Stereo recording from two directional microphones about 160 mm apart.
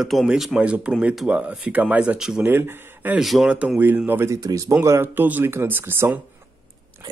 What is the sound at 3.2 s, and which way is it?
Speech, centre (ahead or behind).